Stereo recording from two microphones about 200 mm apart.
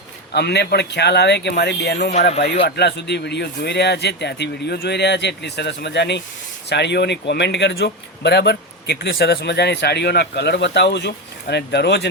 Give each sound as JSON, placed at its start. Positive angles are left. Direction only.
{"t": 0.3, "sound": "speech", "side_deg": 55}
{"t": 2.0, "sound": "speech", "side_deg": 35}
{"t": 2.6, "sound": "speech", "side_deg": 55}